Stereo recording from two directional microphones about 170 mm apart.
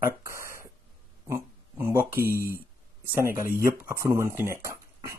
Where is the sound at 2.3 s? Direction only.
60° right (ahead or behind).